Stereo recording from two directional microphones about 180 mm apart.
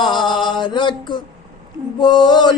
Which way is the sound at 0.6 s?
25° left (ahead or behind).